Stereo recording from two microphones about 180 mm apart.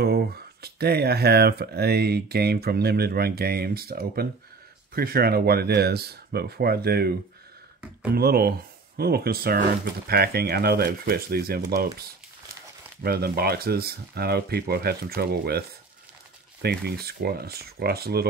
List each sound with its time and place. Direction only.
0.0 s speech: 60° right (ahead or behind)
8.1 s speech: 60° right (ahead or behind)
13.0 s speech: 60° right (ahead or behind)
16.8 s speech: 60° right (ahead or behind)